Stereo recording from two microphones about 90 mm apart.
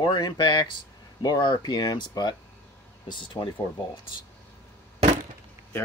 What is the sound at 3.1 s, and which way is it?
Speech, 65° left (ahead or behind).